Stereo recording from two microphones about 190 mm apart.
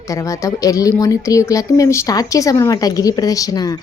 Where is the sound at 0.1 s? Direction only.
15° left (ahead or behind).